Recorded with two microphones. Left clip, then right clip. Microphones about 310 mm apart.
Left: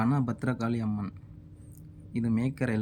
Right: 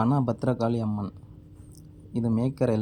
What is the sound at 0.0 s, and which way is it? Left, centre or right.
A man's voice, centre.